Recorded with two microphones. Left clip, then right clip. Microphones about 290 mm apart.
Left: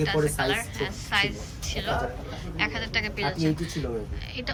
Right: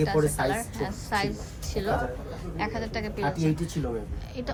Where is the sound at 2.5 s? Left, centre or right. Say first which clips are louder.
Left 4 dB; centre.